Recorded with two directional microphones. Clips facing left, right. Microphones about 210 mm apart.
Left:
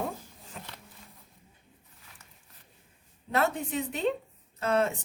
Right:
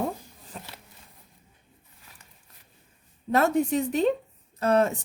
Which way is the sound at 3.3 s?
40° right (ahead or behind).